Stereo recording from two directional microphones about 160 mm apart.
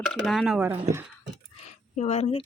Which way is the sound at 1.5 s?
45° left (ahead or behind).